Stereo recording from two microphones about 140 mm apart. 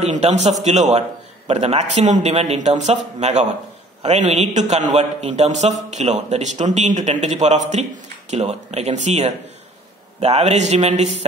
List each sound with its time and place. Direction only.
0.0 s a man's voice: 55° right (ahead or behind)